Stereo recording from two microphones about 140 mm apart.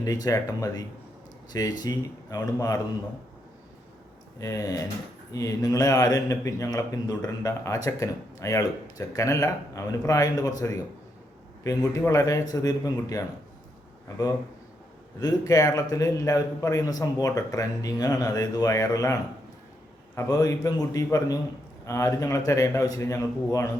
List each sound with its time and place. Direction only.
0.0 s speech: 25° left (ahead or behind)
4.4 s speech: 25° left (ahead or behind)
15.2 s speech: 25° left (ahead or behind)
20.1 s speech: 25° left (ahead or behind)